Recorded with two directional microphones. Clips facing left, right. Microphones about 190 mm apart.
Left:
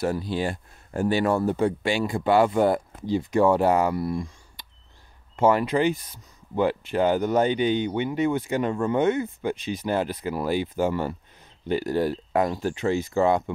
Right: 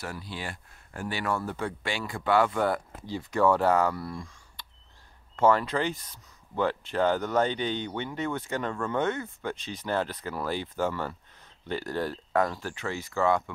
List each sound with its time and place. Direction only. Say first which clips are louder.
0.0 s speech: left 12 dB; 20° left (ahead or behind)